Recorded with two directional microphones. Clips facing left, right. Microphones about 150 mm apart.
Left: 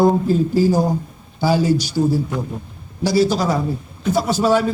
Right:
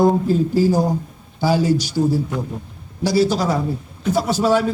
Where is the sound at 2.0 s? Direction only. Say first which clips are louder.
Left 1 dB; 35° left (ahead or behind).